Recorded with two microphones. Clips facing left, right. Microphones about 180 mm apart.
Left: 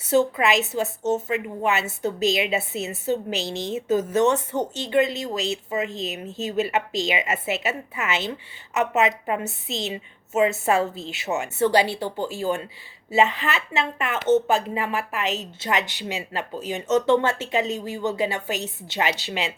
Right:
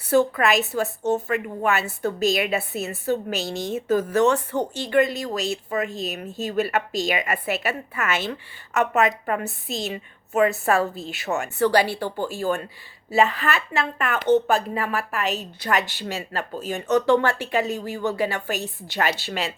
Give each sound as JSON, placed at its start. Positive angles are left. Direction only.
{"t": 0.0, "sound": "a woman's voice", "side_deg": 20}